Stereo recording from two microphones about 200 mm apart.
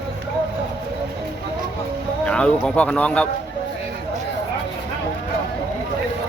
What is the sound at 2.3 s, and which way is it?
Speech, 5° left (ahead or behind).